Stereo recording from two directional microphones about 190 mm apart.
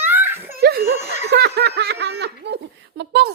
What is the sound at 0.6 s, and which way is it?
Laughter, 55° right (ahead or behind).